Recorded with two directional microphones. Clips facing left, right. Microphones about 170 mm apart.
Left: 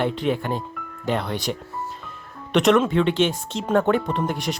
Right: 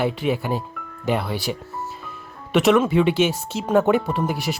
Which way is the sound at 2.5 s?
5° right (ahead or behind).